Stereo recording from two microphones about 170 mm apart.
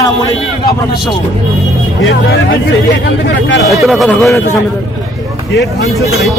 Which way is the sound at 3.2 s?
90° left.